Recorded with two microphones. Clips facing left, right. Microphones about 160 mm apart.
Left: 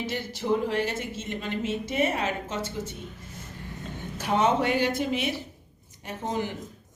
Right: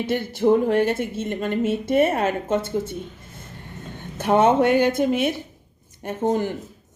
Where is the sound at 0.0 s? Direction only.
55° right (ahead or behind).